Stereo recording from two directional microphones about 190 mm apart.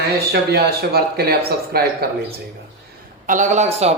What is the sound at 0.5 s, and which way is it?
Speech, 55° right (ahead or behind).